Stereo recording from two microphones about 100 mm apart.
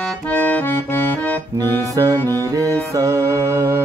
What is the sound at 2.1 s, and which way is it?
Music, 25° left (ahead or behind).